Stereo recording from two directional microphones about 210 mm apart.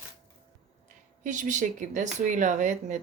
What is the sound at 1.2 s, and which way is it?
Speech, 35° right (ahead or behind).